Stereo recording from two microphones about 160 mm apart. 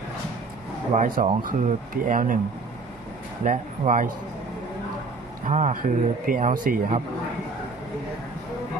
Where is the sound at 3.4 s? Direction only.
55° right (ahead or behind).